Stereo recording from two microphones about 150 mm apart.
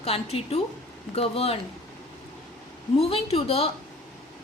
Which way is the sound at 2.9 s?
40° left (ahead or behind).